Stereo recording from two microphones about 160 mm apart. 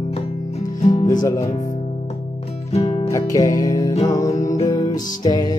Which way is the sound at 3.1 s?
20° left (ahead or behind).